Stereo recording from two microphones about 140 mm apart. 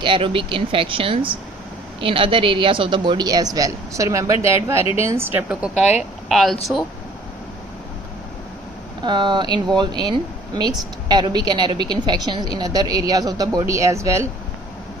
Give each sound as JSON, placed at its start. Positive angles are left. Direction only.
{"t": 0.0, "sound": "a woman's voice", "side_deg": -35}
{"t": 9.0, "sound": "speech", "side_deg": -35}